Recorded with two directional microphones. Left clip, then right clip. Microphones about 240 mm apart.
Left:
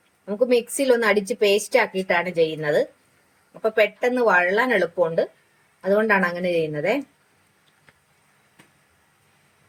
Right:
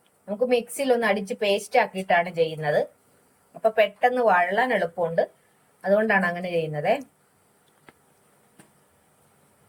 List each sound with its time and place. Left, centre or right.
0.4 s a woman's voice: centre